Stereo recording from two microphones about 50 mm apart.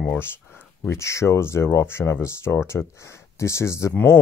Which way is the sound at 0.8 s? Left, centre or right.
Left.